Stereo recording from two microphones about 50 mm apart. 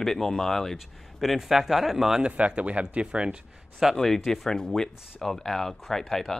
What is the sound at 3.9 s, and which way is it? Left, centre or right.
Speech, centre.